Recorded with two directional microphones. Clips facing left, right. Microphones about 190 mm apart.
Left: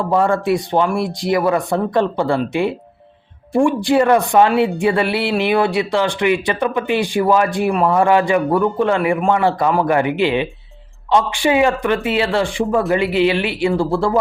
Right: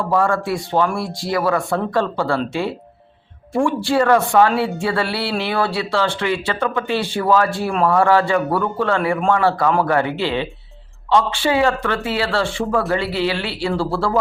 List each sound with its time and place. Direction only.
0.0 s speech: 20° left (ahead or behind)